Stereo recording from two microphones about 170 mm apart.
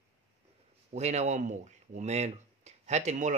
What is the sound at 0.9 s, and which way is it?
Speech, 40° right (ahead or behind).